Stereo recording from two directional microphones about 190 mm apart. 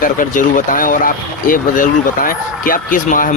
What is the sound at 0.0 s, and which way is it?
Speech, 45° left (ahead or behind).